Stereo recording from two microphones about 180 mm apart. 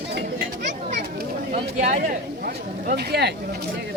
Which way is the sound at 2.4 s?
60° right (ahead or behind).